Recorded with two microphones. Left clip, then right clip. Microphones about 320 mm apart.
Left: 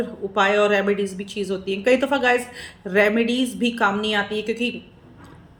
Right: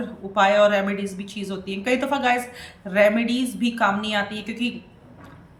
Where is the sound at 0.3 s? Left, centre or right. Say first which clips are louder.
Right 1 dB; centre.